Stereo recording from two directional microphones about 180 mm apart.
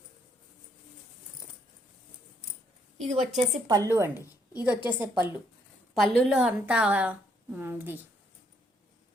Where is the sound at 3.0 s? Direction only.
35° right (ahead or behind).